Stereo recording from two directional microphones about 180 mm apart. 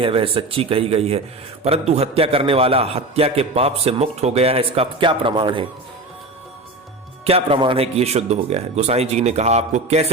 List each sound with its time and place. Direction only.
0.0 s a man's voice: 30° right (ahead or behind)
7.3 s a man's voice: 30° right (ahead or behind)